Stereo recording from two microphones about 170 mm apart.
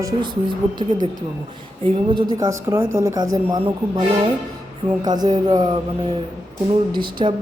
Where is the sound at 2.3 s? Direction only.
20° right (ahead or behind).